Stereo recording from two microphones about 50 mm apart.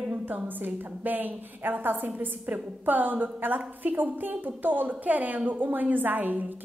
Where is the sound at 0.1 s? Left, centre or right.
Right.